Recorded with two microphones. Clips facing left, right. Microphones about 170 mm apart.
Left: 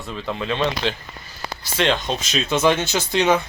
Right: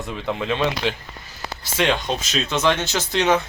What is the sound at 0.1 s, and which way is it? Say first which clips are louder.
Speech: even; 15° right (ahead or behind).